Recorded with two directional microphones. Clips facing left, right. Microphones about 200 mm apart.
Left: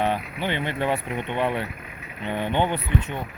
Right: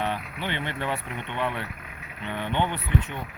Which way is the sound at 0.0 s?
45° left (ahead or behind).